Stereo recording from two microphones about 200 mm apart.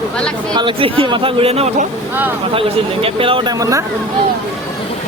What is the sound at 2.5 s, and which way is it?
Speech, 30° right (ahead or behind).